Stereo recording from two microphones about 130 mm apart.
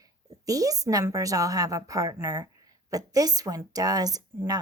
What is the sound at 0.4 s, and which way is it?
A woman's voice, 25° right (ahead or behind).